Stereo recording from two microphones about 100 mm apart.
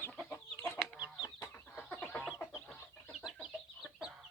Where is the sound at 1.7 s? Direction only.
15° left (ahead or behind).